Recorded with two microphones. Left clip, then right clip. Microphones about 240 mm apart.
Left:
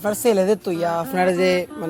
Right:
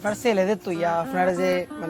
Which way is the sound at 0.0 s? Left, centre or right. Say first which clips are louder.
Left 4 dB; left.